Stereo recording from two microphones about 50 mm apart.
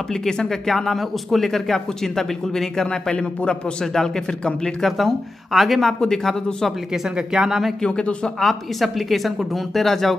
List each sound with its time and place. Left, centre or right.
0.1 s speech: centre
4.8 s a woman's voice: centre
6.9 s a woman's voice: centre
7.8 s a man's voice: left
8.4 s a woman's voice: centre